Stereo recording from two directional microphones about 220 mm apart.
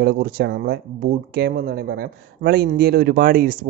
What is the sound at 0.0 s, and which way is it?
Speech, 45° right (ahead or behind).